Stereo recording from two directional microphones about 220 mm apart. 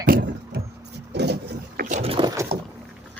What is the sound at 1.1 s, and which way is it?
Vehicle, 50° right (ahead or behind).